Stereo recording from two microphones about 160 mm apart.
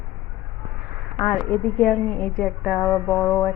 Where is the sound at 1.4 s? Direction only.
10° left (ahead or behind).